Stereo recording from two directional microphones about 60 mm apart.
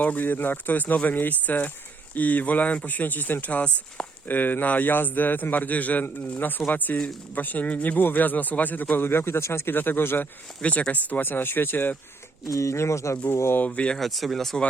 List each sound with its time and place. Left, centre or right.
0.0 s a man's voice: left
10.6 s a man's voice: left
12.5 s speech: left
13.6 s speech: left
13.9 s speech: centre